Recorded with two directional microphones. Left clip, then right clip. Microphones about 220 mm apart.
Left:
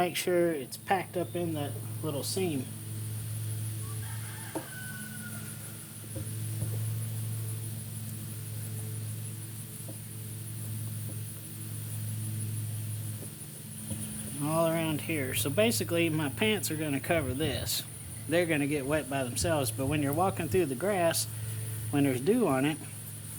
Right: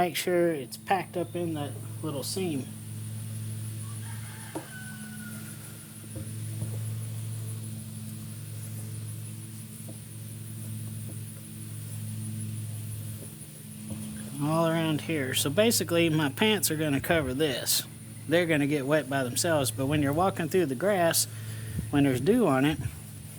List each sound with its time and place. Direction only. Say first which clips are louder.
0.0 s speech: right 2 dB; 30° right (ahead or behind)
14.4 s speech: right 2 dB; 35° right (ahead or behind)